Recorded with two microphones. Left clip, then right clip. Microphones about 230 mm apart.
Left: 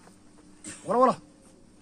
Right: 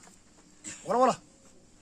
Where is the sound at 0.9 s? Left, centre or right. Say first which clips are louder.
Left 2 dB; right.